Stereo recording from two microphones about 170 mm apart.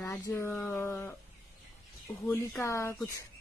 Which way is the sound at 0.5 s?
10° left (ahead or behind).